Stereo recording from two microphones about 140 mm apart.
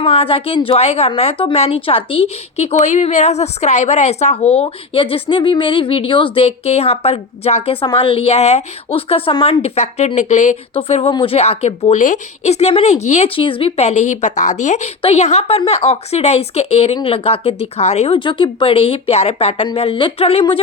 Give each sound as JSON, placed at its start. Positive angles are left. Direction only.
{"t": 0.0, "sound": "speech", "side_deg": 45}
{"t": 18.2, "sound": "speech", "side_deg": 35}